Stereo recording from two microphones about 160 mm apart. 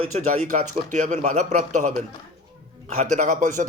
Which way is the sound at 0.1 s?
45° right (ahead or behind).